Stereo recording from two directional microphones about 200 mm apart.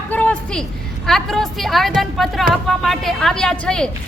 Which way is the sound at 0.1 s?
5° left (ahead or behind).